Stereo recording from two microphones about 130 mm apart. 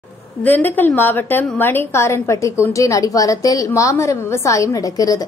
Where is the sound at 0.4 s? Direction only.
15° left (ahead or behind).